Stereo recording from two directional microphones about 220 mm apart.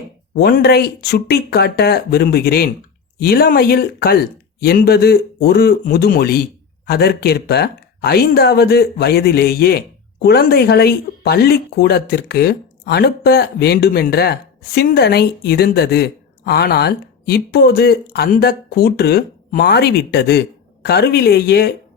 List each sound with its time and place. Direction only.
0.3 s speech: 45° left (ahead or behind)